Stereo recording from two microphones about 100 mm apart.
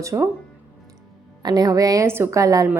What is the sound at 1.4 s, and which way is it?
A woman's voice, 40° right (ahead or behind).